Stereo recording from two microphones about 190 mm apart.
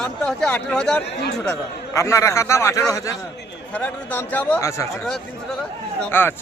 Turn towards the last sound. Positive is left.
turn(degrees=10)  # may be behind; listen again after turning